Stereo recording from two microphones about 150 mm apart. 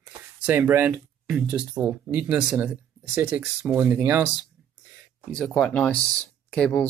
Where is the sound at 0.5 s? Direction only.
15° right (ahead or behind).